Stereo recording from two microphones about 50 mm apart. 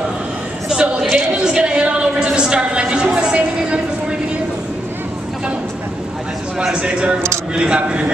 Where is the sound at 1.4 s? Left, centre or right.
Centre.